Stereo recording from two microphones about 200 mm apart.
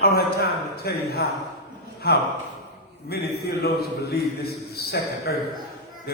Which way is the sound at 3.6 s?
55° left (ahead or behind).